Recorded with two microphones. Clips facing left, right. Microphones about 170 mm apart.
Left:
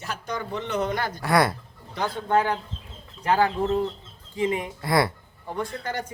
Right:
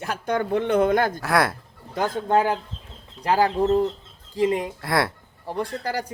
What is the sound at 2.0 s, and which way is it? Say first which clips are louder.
Speech: right 4 dB; 45° right (ahead or behind).